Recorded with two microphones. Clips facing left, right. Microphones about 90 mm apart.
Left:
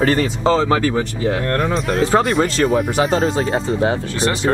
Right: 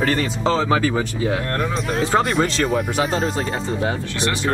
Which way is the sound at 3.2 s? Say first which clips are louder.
Left 5 dB; 40° left (ahead or behind).